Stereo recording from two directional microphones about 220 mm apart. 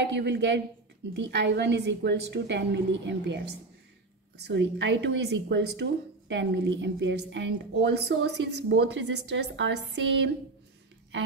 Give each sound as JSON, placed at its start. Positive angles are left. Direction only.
{"t": 0.0, "sound": "a woman's voice", "side_deg": -50}
{"t": 4.4, "sound": "a woman's voice", "side_deg": -50}